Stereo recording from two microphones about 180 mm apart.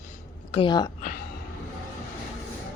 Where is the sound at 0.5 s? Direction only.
25° left (ahead or behind).